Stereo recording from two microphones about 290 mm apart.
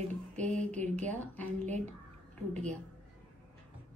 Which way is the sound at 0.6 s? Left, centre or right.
Centre.